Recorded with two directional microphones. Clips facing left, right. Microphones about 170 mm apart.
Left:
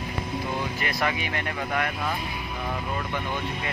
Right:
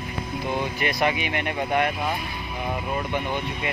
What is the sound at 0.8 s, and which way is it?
Speech, 20° right (ahead or behind).